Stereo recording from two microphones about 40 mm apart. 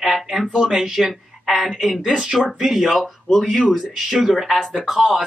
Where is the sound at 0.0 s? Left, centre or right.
Centre.